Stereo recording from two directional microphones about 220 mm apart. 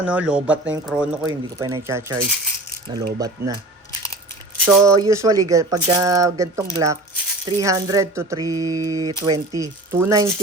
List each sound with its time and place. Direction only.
0.0 s speech: 5° right (ahead or behind)
4.5 s speech: 10° right (ahead or behind)